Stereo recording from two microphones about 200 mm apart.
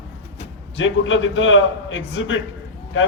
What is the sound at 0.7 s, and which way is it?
A man's voice, 70° left (ahead or behind).